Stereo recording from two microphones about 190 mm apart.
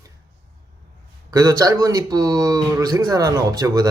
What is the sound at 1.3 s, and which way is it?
A man's voice, 15° right (ahead or behind).